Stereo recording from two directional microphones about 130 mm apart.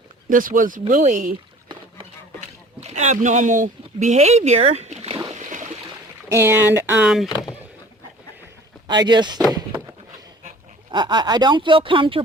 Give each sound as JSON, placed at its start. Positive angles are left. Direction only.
{"t": 0.3, "sound": "speech", "side_deg": -90}
{"t": 2.8, "sound": "speech", "side_deg": -65}
{"t": 5.3, "sound": "a sound", "side_deg": -70}
{"t": 6.2, "sound": "speech", "side_deg": -15}
{"t": 7.3, "sound": "speech", "side_deg": 35}
{"t": 8.9, "sound": "speech", "side_deg": -35}
{"t": 10.9, "sound": "speech", "side_deg": -35}